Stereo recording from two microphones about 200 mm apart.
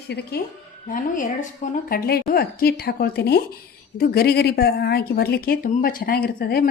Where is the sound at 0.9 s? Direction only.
40° left (ahead or behind).